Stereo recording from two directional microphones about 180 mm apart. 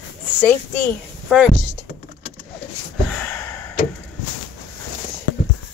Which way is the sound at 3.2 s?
10° left (ahead or behind).